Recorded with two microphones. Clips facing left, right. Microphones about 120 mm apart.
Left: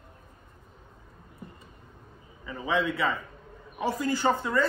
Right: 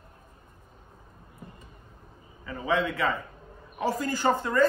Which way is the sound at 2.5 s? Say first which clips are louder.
Right 1 dB; 15° left (ahead or behind).